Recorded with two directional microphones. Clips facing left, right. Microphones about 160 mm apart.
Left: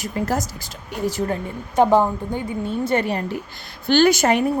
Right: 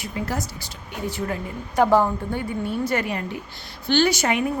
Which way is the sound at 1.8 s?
20° left (ahead or behind).